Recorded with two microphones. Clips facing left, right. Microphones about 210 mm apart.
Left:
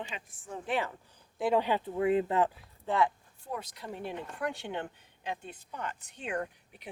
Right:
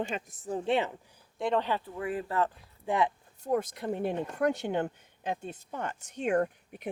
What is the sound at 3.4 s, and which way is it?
Speech, 50° right (ahead or behind).